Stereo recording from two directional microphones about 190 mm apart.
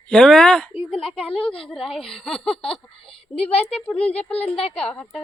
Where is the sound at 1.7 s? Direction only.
Centre (ahead or behind).